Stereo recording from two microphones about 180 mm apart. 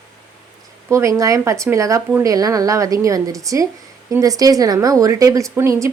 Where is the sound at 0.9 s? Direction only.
15° right (ahead or behind).